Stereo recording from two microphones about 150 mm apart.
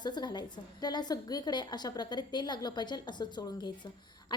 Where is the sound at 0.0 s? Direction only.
30° left (ahead or behind).